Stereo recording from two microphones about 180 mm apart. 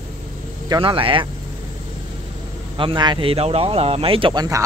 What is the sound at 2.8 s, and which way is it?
Speech, 25° right (ahead or behind).